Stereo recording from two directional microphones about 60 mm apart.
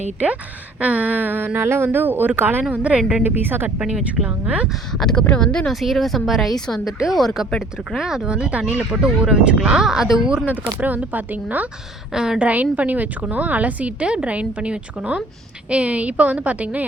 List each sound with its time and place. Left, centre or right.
0.8 s a woman's voice: right
2.7 s a woman's voice: right
3.2 s a woman's voice: right
3.8 s a woman's voice: centre
4.9 s speech: centre
5.7 s speech: centre
10.5 s a woman's voice: right
12.1 s speech: centre
12.5 s a woman's voice: right